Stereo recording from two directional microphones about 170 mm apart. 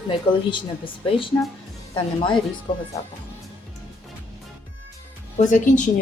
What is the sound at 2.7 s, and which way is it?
Speech, 30° left (ahead or behind).